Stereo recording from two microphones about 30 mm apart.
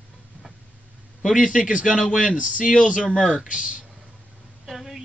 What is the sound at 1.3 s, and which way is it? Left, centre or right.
Speech, right.